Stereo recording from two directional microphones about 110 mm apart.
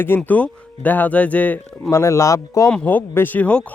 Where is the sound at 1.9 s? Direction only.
25° left (ahead or behind).